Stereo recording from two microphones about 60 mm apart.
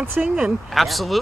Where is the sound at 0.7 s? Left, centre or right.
Centre.